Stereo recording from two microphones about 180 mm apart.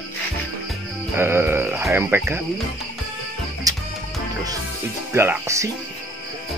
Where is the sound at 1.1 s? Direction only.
15° right (ahead or behind).